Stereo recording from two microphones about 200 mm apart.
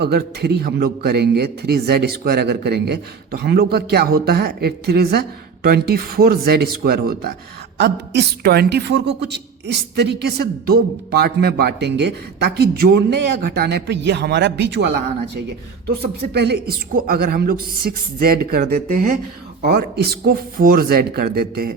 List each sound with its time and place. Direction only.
0.0 s a man's voice: 55° right (ahead or behind)